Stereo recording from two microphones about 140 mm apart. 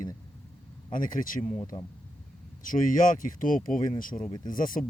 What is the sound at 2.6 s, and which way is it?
Speech, 75° left (ahead or behind).